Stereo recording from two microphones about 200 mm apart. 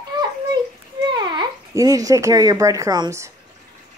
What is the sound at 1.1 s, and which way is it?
A child's voice, 20° right (ahead or behind).